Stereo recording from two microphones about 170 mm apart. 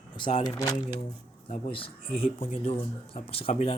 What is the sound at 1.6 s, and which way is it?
Speech, 30° left (ahead or behind).